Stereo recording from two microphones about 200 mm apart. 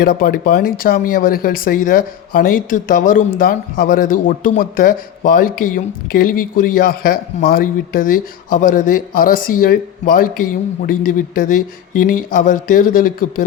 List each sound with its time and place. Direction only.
0.0 s speech: 45° left (ahead or behind)
11.9 s speech: 45° left (ahead or behind)